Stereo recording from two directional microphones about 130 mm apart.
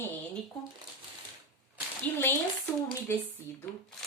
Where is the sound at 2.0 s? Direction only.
15° left (ahead or behind).